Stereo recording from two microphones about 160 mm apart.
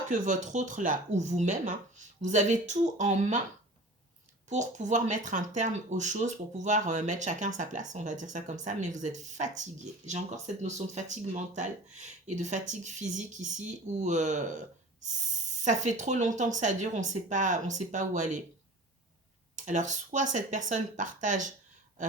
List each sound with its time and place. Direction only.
0.1 s speech: 50° right (ahead or behind)
4.4 s speech: 50° right (ahead or behind)
15.6 s speech: 50° right (ahead or behind)
19.5 s speech: 50° right (ahead or behind)